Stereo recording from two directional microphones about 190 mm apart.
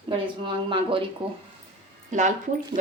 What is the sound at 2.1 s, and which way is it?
Speech, 40° right (ahead or behind).